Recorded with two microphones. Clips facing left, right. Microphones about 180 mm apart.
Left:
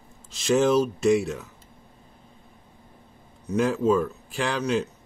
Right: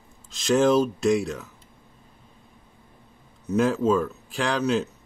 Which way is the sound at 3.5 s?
Centre (ahead or behind).